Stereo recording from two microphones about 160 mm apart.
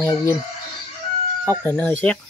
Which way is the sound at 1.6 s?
10° left (ahead or behind).